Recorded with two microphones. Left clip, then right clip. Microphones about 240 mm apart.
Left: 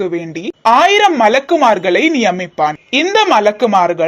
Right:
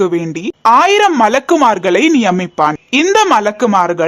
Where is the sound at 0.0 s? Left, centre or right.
Right.